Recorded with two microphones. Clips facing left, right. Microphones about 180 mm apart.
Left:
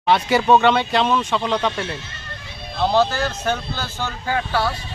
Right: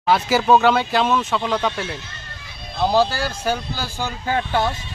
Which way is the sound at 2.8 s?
10° right (ahead or behind).